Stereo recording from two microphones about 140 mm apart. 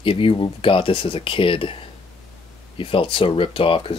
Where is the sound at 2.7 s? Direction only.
40° left (ahead or behind).